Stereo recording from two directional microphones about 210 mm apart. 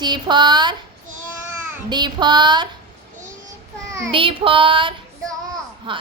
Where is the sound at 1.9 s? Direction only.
20° right (ahead or behind).